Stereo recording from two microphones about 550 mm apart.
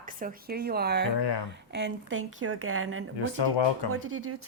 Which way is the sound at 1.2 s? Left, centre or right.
Left.